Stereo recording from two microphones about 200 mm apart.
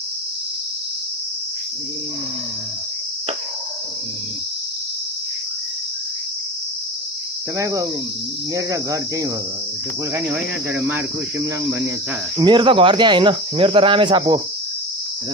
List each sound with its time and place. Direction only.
7.5 s cricket: 15° right (ahead or behind)
12.4 s speech: 25° right (ahead or behind)